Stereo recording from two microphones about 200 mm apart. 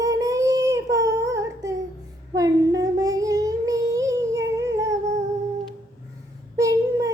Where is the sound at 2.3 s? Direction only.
15° right (ahead or behind).